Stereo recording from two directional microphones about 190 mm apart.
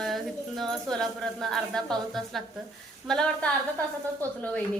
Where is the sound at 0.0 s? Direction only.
Centre (ahead or behind).